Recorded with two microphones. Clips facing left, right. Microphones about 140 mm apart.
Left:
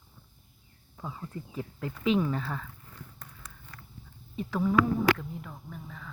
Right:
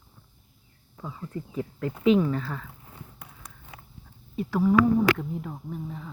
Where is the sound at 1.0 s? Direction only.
5° left (ahead or behind).